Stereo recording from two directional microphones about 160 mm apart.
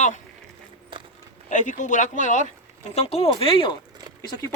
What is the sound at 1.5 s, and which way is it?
Speech, 50° left (ahead or behind).